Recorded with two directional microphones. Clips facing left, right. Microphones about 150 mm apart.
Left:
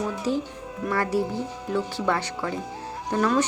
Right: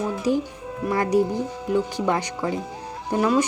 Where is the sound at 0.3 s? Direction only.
15° right (ahead or behind).